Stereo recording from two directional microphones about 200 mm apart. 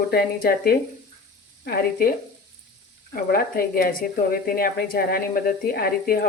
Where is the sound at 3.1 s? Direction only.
50° left (ahead or behind).